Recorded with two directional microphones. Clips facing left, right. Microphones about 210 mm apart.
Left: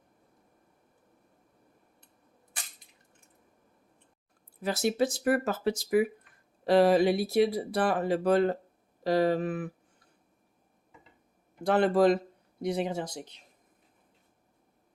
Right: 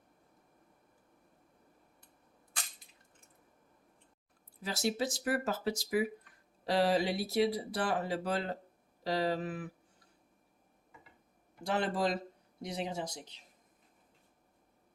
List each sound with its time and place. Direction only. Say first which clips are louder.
4.6 s speech: left 6 dB; 55° left (ahead or behind)
11.6 s speech: left 9 dB; 55° left (ahead or behind)